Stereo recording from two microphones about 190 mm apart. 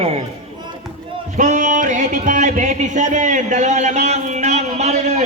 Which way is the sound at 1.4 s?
40° right (ahead or behind).